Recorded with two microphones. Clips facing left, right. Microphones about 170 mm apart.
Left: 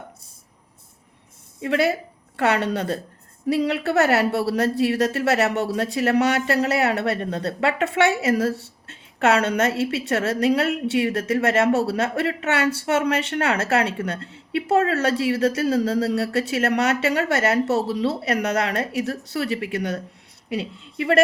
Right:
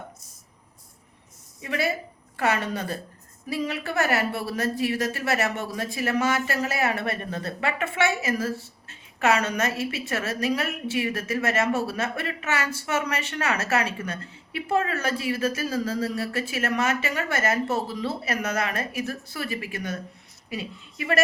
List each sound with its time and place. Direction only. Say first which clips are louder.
1.6 s a woman's voice: left 6 dB; 65° left (ahead or behind)